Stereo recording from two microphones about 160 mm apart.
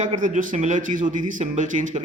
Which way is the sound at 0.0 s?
50° right (ahead or behind).